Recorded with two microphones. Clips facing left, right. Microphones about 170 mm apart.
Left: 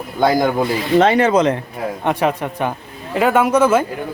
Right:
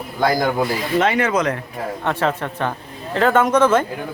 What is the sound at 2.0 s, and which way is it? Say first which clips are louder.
Speech: left 3 dB; 15° left (ahead or behind).